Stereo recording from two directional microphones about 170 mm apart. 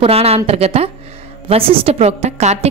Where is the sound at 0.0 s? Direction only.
35° right (ahead or behind).